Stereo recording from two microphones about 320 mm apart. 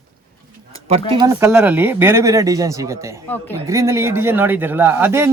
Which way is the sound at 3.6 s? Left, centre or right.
Centre.